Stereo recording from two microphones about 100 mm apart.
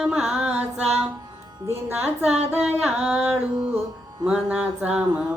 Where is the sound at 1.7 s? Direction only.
20° right (ahead or behind).